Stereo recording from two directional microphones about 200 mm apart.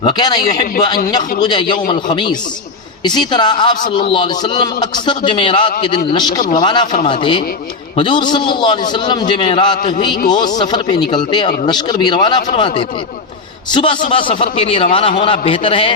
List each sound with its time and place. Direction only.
0.0 s a man's voice: 20° left (ahead or behind)
14.1 s a man's voice: 25° left (ahead or behind)